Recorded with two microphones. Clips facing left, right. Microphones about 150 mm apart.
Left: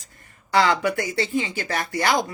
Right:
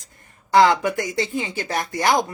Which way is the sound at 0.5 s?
20° right (ahead or behind).